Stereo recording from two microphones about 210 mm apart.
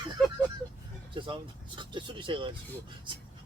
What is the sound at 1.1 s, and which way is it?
Speech, 25° right (ahead or behind).